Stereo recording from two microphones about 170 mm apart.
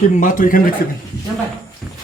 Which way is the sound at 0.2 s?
50° left (ahead or behind).